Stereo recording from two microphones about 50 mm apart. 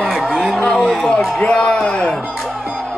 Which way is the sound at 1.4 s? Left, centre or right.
Left.